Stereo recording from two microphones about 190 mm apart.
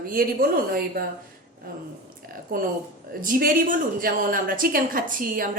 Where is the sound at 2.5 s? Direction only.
50° right (ahead or behind).